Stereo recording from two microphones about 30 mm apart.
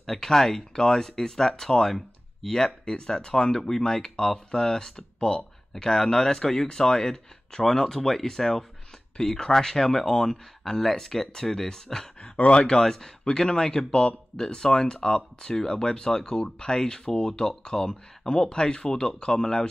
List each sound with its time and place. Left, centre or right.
0.0 s speech: centre